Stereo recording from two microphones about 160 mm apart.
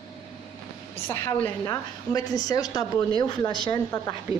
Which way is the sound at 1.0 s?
15° left (ahead or behind).